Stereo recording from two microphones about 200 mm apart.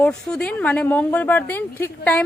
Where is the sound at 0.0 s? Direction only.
5° left (ahead or behind).